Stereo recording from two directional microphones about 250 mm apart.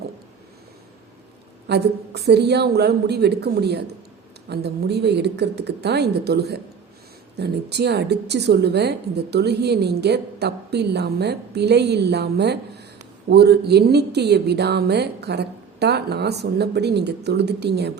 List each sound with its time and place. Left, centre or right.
1.6 s a woman's voice: right